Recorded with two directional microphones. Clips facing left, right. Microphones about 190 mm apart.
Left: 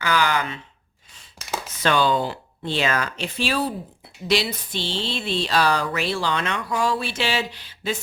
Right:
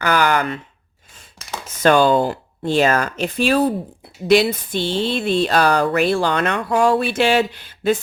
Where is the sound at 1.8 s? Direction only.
45° right (ahead or behind).